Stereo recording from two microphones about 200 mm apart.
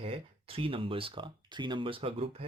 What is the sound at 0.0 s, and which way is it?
Speech, 30° right (ahead or behind).